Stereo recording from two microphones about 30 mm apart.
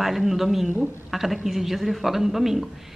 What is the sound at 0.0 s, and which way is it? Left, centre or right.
Speech, centre.